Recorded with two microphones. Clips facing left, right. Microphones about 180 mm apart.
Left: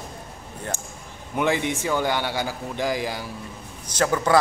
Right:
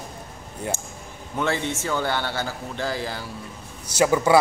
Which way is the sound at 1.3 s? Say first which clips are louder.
Left 2 dB; 15° left (ahead or behind).